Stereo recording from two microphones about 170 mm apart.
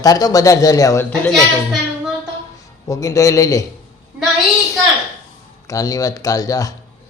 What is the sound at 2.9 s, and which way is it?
Speech, 20° left (ahead or behind).